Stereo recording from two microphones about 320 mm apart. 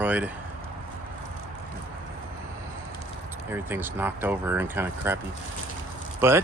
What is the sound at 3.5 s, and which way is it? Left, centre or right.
Speech, centre.